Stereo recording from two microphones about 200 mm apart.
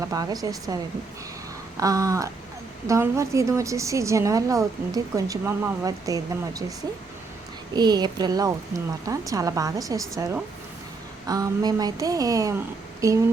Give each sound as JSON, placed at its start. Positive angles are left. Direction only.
{"t": 0.0, "sound": "a woman's voice", "side_deg": -15}
{"t": 1.8, "sound": "a woman's voice", "side_deg": -15}
{"t": 7.8, "sound": "a woman's voice", "side_deg": -20}